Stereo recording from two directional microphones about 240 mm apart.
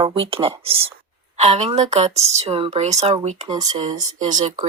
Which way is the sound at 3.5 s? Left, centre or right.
Centre.